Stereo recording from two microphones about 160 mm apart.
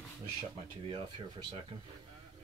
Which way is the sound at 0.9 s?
30° right (ahead or behind).